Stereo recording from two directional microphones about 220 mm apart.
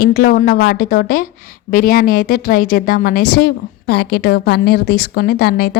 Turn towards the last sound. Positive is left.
turn(degrees=45)  # may be behind; listen again after turning